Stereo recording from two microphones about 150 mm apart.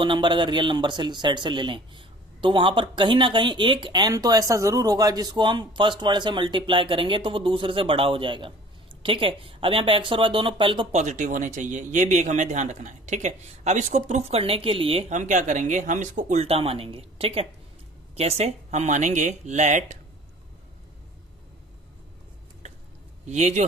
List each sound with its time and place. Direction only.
0.0 s speech: 35° right (ahead or behind)
10.9 s speech: 55° right (ahead or behind); by 15.0 s 35° right (ahead or behind)
15.1 s speech: 55° right (ahead or behind)
23.3 s speech: 50° right (ahead or behind)